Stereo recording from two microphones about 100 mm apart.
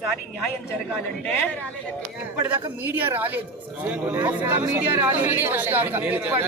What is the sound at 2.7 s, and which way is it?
Speech, 20° right (ahead or behind).